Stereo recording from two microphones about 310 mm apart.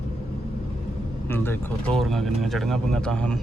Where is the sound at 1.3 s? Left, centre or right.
Centre.